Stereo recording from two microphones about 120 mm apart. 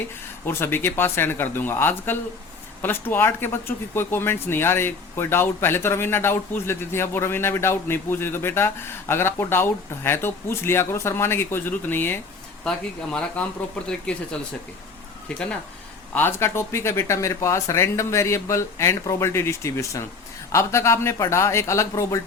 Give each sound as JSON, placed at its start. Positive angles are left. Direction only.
{"t": 0.4, "sound": "speech", "side_deg": 20}
{"t": 15.3, "sound": "speech", "side_deg": 10}
{"t": 16.1, "sound": "speech", "side_deg": 20}